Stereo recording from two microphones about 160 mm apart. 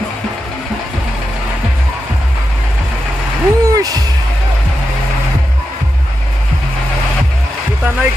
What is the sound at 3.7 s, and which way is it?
Music, 25° right (ahead or behind).